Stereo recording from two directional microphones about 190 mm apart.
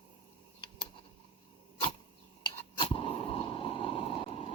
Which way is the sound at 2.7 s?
30° left (ahead or behind).